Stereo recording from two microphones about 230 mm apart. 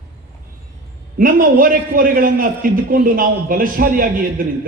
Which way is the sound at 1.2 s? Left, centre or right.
Right.